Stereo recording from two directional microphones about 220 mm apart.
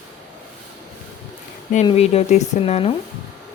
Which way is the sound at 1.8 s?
30° left (ahead or behind).